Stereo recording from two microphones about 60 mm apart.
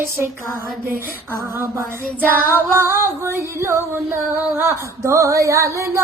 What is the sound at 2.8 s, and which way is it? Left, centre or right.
Female singing, right.